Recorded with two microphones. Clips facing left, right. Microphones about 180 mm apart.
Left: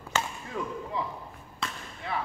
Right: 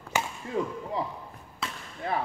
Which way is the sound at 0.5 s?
35° right (ahead or behind).